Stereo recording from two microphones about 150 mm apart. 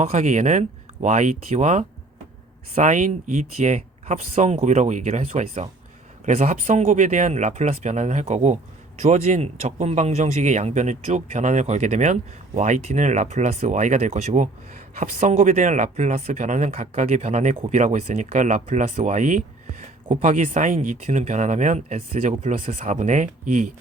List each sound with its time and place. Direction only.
0.0 s speech: 50° right (ahead or behind)